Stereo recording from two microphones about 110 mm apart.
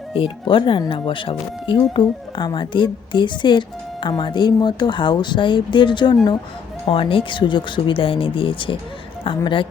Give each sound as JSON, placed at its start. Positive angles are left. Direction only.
{"t": 0.1, "sound": "speech", "side_deg": 50}